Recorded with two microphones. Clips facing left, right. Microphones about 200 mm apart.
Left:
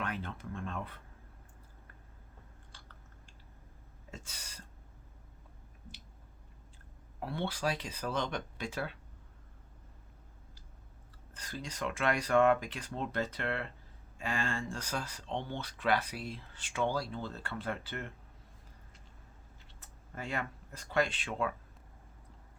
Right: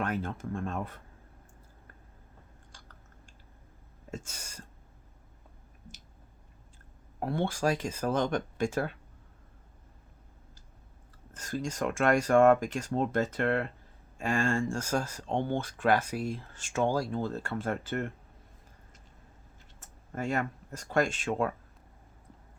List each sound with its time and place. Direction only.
0.0 s speech: 45° right (ahead or behind)
4.1 s speech: 45° right (ahead or behind)
7.2 s speech: 45° right (ahead or behind)
11.3 s speech: 45° right (ahead or behind)
19.8 s speech: 45° right (ahead or behind)